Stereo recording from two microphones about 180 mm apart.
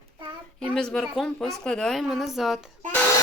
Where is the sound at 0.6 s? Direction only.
5° left (ahead or behind).